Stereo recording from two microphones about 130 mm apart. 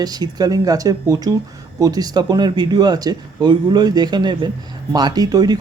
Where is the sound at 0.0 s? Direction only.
30° right (ahead or behind).